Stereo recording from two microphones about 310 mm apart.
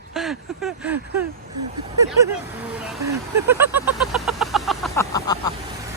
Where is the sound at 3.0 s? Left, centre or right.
Right.